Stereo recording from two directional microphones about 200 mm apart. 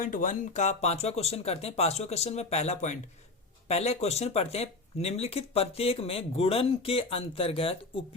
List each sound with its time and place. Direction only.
0.0 s speech: 40° left (ahead or behind)